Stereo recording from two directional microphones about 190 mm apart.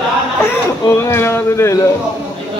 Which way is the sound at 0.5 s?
15° left (ahead or behind).